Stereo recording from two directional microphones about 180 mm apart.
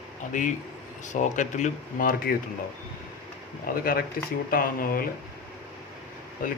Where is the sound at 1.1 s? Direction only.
45° left (ahead or behind).